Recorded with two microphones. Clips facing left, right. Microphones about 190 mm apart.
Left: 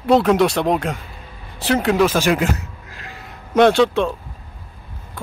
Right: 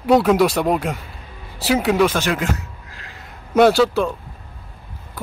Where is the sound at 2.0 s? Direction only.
10° left (ahead or behind).